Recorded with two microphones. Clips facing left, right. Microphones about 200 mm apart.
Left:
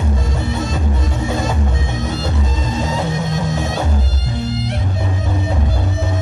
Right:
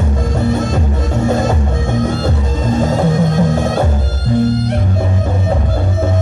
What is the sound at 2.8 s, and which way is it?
Music, 50° right (ahead or behind).